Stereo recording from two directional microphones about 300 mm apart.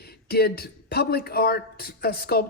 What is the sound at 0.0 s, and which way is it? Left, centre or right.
Speech, left.